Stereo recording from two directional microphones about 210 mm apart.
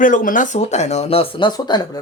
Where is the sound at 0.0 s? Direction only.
40° left (ahead or behind); by 1.8 s 20° left (ahead or behind).